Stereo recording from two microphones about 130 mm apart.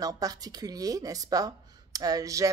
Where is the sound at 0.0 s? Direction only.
30° right (ahead or behind).